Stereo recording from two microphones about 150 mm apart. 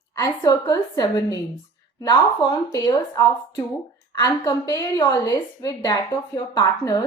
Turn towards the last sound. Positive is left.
turn(degrees=25)  # may be behind; listen again after turning